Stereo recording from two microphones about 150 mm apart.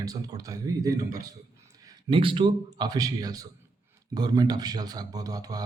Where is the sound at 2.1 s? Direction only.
35° right (ahead or behind).